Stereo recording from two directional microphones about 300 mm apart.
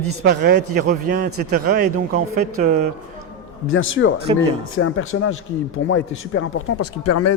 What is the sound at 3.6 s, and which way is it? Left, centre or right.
A man's voice, left.